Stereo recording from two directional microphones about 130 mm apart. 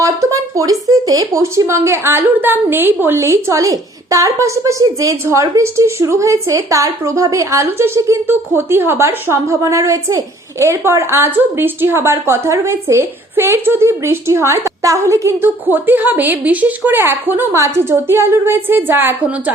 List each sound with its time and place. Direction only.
0.0 s speech: 25° right (ahead or behind)